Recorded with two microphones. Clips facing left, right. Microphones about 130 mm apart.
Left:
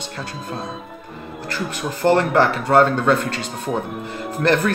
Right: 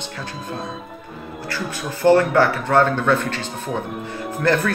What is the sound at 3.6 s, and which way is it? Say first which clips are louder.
Speech: left 3 dB; centre (ahead or behind).